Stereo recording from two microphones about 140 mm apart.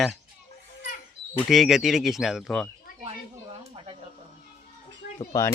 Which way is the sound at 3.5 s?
40° right (ahead or behind).